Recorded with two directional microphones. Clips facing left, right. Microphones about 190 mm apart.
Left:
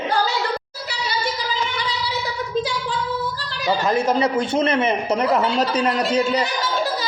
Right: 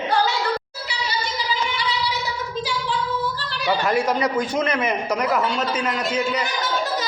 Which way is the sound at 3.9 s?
30° left (ahead or behind).